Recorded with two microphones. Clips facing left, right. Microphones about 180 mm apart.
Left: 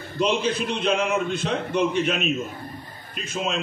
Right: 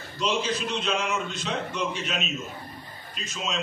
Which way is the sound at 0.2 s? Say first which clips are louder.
Left 4 dB; 55° left (ahead or behind).